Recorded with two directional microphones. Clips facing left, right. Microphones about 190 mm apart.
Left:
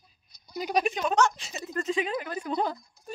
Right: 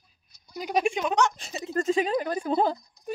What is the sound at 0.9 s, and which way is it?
Speech, 15° right (ahead or behind).